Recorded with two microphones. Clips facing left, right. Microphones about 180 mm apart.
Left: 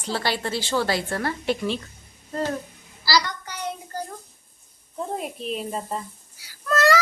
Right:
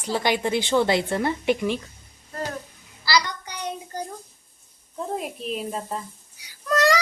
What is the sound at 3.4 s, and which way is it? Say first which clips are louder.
Child singing: even; 15° right (ahead or behind).